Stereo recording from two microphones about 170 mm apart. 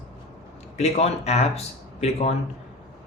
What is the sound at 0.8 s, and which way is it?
Speech, 40° left (ahead or behind).